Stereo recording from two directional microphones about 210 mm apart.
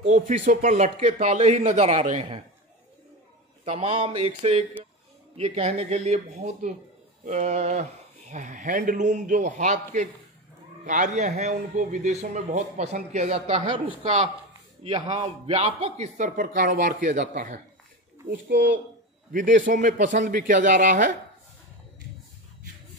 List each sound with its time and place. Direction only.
0.0 s a man's voice: 35° right (ahead or behind)
3.6 s a man's voice: 30° right (ahead or behind)
19.3 s a man's voice: 35° right (ahead or behind)